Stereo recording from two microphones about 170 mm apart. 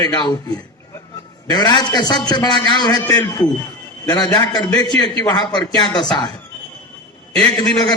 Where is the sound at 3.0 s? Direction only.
15° left (ahead or behind).